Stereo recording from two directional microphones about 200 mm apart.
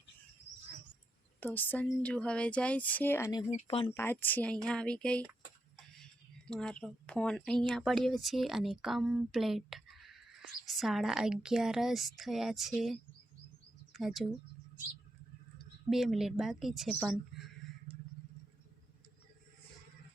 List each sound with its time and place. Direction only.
1.4 s speech: 10° left (ahead or behind)
3.5 s speech: 30° left (ahead or behind)
3.9 s speech: 10° left (ahead or behind)
6.5 s speech: 5° left (ahead or behind)
15.9 s speech: centre (ahead or behind)